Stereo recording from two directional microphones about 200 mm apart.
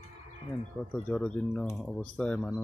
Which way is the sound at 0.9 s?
5° left (ahead or behind).